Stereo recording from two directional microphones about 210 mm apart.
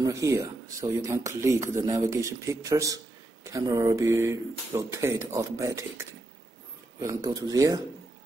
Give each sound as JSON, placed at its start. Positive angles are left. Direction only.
{"t": 0.0, "sound": "speech", "side_deg": -15}